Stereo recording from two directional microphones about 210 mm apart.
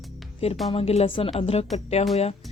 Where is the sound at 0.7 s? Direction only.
30° left (ahead or behind).